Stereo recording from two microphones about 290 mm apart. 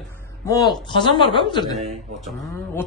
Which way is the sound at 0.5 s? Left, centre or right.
Centre.